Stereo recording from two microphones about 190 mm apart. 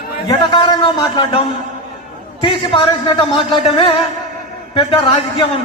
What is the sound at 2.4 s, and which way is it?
Speech, 25° left (ahead or behind).